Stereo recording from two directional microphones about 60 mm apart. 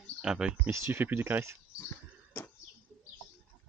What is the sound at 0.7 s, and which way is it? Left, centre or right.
Speech, right.